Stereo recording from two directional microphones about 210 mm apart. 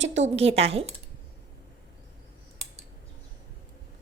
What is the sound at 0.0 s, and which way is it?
Speech, 30° right (ahead or behind).